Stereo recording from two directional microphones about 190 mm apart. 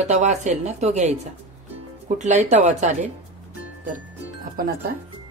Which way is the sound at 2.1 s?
35° right (ahead or behind).